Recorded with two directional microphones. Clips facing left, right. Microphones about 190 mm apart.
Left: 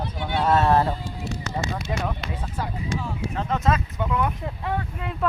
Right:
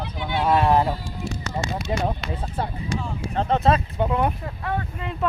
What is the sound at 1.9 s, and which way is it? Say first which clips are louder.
Speech: right 3 dB; 30° right (ahead or behind).